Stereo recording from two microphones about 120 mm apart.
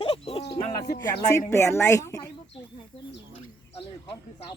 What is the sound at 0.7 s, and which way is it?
Speech, 30° left (ahead or behind).